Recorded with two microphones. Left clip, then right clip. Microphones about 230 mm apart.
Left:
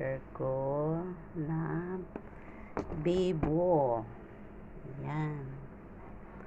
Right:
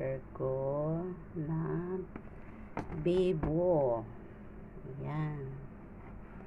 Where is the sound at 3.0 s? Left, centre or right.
Centre.